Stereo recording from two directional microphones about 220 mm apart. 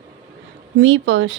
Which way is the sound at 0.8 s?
60° right (ahead or behind).